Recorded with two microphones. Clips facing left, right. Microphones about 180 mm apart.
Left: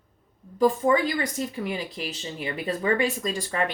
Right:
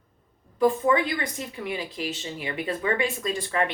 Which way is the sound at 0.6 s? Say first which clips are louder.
Left 1 dB; 40° left (ahead or behind).